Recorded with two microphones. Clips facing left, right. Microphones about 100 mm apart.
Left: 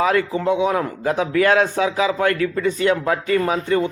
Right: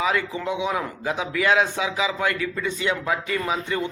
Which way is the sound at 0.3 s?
40° left (ahead or behind).